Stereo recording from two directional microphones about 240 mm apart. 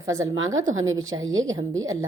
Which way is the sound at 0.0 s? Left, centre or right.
Centre.